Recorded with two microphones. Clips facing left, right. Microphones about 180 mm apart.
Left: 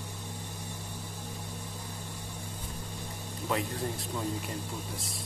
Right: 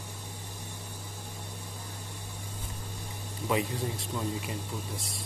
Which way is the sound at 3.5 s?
Centre (ahead or behind).